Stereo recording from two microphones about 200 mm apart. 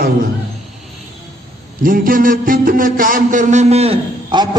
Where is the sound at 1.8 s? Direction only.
45° right (ahead or behind).